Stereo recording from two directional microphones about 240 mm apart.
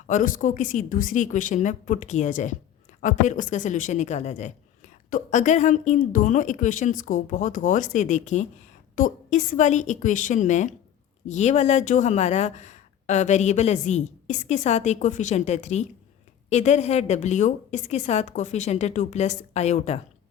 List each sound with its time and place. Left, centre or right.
0.1 s a woman's voice: left